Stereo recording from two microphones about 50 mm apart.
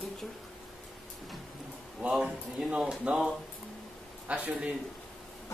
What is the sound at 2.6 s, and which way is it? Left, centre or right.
Speech, centre.